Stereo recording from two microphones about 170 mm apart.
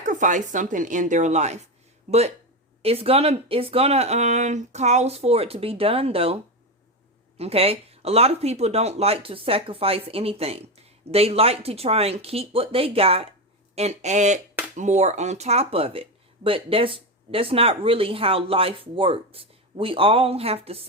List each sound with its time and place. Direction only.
0.0 s speech: 50° right (ahead or behind)
7.3 s speech: 35° right (ahead or behind)